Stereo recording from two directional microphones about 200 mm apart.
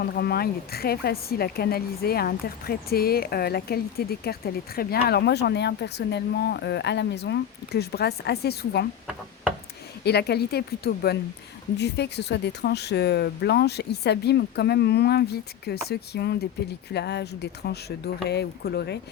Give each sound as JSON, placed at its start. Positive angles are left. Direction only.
{"t": 0.1, "sound": "a woman's voice", "side_deg": 50}
{"t": 10.0, "sound": "a woman's voice", "side_deg": 55}